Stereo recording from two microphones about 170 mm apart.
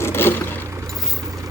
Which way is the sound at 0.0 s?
15° left (ahead or behind).